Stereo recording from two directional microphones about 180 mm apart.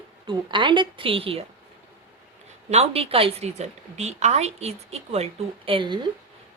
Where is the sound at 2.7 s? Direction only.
35° right (ahead or behind).